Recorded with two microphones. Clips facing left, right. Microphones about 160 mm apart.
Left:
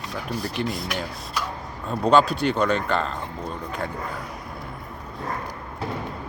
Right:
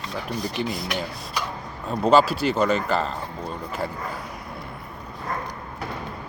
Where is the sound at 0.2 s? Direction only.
5° left (ahead or behind).